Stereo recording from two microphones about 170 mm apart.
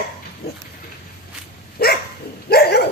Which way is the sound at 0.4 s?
70° left (ahead or behind).